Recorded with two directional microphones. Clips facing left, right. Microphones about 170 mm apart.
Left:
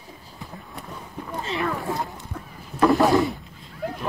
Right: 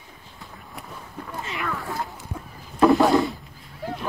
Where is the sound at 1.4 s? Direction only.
30° left (ahead or behind).